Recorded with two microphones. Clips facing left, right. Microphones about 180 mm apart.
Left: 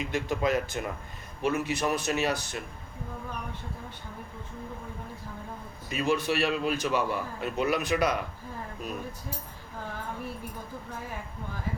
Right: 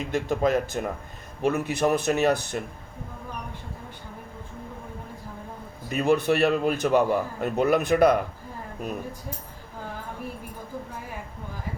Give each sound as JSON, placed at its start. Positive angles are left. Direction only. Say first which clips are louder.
{"t": 0.0, "sound": "a man's voice", "louder": "right 4 dB", "side_deg": -45}
{"t": 5.9, "sound": "a man's voice", "louder": "right 6 dB", "side_deg": -55}